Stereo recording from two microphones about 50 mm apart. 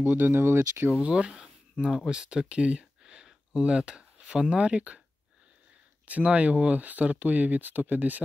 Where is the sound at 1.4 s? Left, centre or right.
Centre.